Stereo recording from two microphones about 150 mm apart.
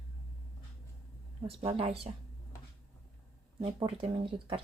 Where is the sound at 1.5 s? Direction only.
40° right (ahead or behind).